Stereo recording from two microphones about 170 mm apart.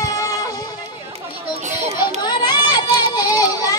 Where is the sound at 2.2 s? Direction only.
25° left (ahead or behind).